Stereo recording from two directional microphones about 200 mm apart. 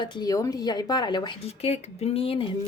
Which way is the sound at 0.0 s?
20° left (ahead or behind).